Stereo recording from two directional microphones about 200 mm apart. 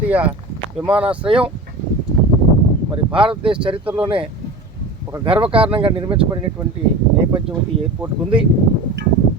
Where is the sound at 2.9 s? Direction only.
25° right (ahead or behind).